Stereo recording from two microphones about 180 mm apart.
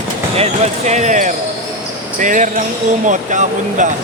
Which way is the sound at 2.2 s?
45° right (ahead or behind).